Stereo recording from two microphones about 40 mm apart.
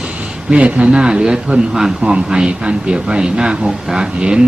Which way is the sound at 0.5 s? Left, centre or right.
Right.